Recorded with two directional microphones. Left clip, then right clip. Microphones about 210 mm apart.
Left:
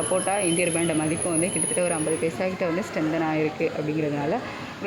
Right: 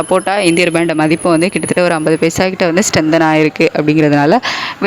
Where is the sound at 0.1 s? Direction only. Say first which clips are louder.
Right 13 dB; 35° right (ahead or behind).